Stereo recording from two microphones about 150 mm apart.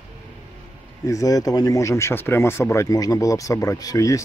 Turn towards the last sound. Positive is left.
turn(degrees=20)  # may be behind; listen again after turning